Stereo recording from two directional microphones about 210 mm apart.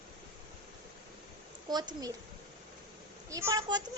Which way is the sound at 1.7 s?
20° right (ahead or behind).